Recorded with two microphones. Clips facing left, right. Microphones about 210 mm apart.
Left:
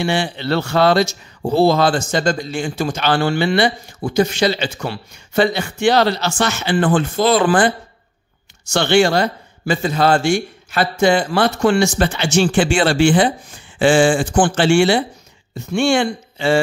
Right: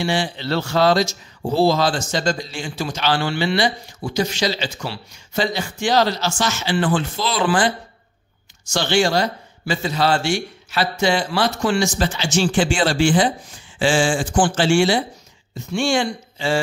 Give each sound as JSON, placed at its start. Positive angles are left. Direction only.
{"t": 0.0, "sound": "speech", "side_deg": 60}